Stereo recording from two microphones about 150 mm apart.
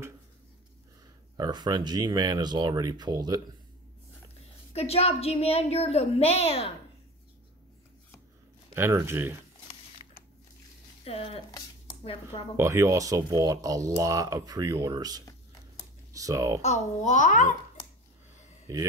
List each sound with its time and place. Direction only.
1.3 s speech: 30° right (ahead or behind)
4.7 s a woman's voice: 45° left (ahead or behind)
8.7 s speech: 15° right (ahead or behind)
10.0 s a sound: 35° left (ahead or behind)
11.1 s speech: 40° left (ahead or behind)
12.5 s speech: 20° right (ahead or behind)
16.6 s a child's voice: 55° left (ahead or behind)
18.7 s speech: 20° right (ahead or behind)